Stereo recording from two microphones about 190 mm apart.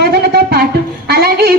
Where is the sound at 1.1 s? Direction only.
55° right (ahead or behind).